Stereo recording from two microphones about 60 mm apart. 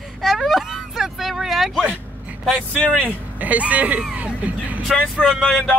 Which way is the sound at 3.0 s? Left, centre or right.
Right.